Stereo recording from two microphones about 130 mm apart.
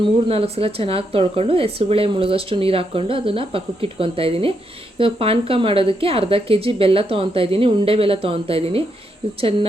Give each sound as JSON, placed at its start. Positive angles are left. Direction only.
{"t": 0.0, "sound": "a woman's voice", "side_deg": -50}